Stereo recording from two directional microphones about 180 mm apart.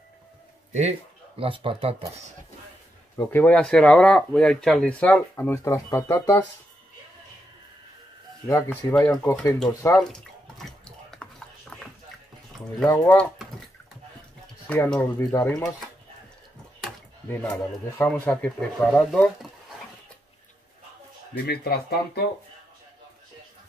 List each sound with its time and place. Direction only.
0.7 s speech: 35° right (ahead or behind)
3.2 s speech: 10° left (ahead or behind)
8.5 s speech: 15° left (ahead or behind)
8.9 s speech: 5° left (ahead or behind)
9.9 s drip: centre (ahead or behind)
12.8 s speech: 10° left (ahead or behind)
14.7 s speech: 10° left (ahead or behind)
16.8 s a sound: 5° left (ahead or behind)
17.9 s speech: 10° left (ahead or behind)
21.5 s speech: 60° left (ahead or behind)